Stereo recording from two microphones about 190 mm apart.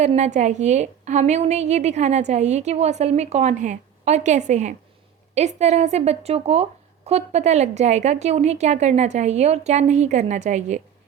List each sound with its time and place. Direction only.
0.0 s speech: 40° right (ahead or behind)